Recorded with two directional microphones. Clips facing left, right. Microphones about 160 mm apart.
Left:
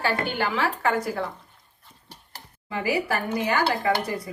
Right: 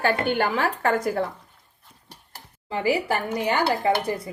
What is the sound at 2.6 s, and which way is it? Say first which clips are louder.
Dishes: right 2 dB; 30° right (ahead or behind).